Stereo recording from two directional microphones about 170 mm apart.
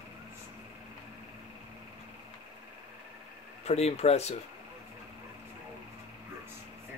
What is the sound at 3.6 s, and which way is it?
Speech, 40° left (ahead or behind).